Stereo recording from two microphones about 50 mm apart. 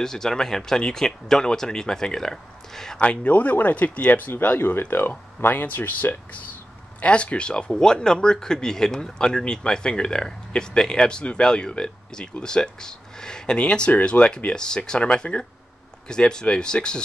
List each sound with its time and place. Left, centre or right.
0.0 s speech: centre
3.0 s speech: left
7.0 s speech: left